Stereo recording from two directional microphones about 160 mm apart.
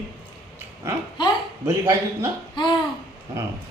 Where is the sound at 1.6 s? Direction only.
20° right (ahead or behind).